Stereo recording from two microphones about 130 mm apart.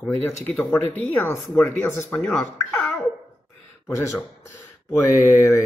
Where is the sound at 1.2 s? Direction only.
10° left (ahead or behind).